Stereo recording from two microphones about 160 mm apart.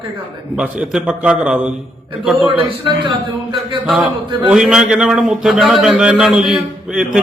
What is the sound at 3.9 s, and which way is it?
A man's voice, centre (ahead or behind).